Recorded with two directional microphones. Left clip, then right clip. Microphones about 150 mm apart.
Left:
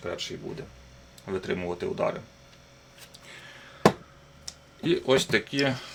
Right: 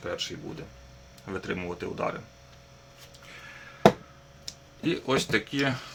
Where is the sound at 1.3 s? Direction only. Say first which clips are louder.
Left 3 dB; 10° left (ahead or behind).